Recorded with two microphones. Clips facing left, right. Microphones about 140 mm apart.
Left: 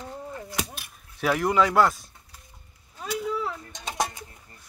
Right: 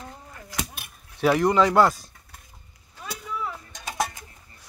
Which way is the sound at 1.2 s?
Centre (ahead or behind).